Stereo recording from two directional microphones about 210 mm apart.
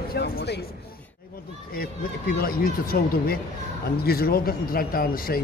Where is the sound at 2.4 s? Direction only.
45° left (ahead or behind).